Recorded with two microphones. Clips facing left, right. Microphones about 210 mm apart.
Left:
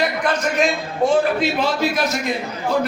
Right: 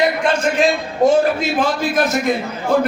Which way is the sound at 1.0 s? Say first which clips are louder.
Right 3 dB; 40° right (ahead or behind).